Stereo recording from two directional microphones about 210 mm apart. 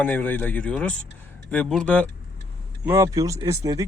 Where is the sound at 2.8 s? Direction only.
15° right (ahead or behind).